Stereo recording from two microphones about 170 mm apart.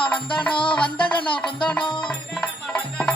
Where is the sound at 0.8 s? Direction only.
30° left (ahead or behind).